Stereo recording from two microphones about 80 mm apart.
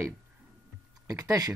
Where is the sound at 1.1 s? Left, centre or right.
Right.